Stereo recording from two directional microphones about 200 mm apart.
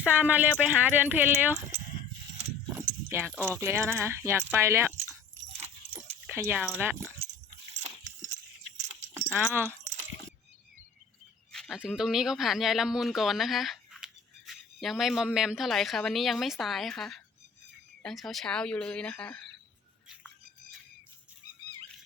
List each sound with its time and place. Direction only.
0.0 s speech: 10° right (ahead or behind)
2.7 s speech: 10° right (ahead or behind)
5.6 s keys jangling: 10° right (ahead or behind)
7.7 s a sound: 35° right (ahead or behind)
9.1 s keys jangling: 15° right (ahead or behind)
9.4 s speech: 10° right (ahead or behind)
11.5 s speech: centre (ahead or behind)